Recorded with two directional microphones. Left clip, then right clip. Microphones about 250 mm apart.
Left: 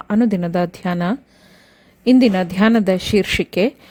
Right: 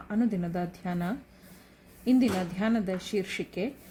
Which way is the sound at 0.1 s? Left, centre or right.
Left.